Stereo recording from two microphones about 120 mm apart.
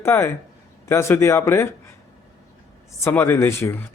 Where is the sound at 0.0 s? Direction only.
20° left (ahead or behind).